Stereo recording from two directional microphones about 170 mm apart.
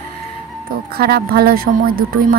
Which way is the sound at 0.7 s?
65° right (ahead or behind).